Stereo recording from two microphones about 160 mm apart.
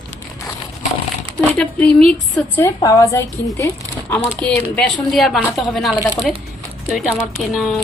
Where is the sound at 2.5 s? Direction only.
20° left (ahead or behind); by 5.9 s centre (ahead or behind).